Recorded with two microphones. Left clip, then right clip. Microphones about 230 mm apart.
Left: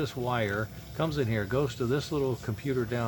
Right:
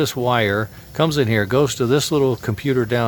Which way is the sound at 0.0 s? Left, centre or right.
Right.